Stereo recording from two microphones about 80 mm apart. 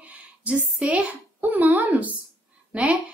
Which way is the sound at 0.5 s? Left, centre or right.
Centre.